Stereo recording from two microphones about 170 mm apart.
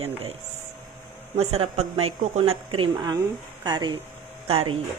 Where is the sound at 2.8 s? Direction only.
25° right (ahead or behind).